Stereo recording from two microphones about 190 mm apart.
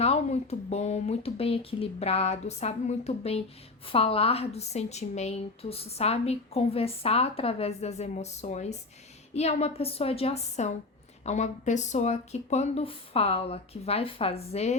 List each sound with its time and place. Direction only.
0.0 s a woman's voice: 35° left (ahead or behind)